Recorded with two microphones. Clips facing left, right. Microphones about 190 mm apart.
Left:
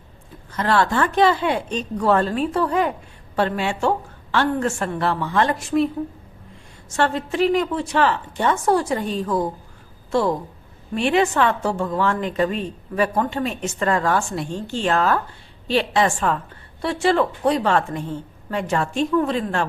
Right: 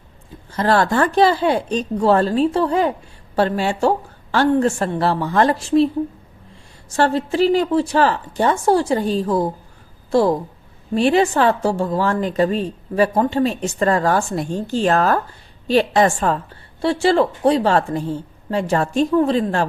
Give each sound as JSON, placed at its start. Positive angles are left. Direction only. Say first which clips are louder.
{"t": 0.5, "sound": "a woman's voice", "louder": "right 3 dB", "side_deg": -35}
{"t": 6.9, "sound": "a woman's voice", "louder": "right 4 dB", "side_deg": -35}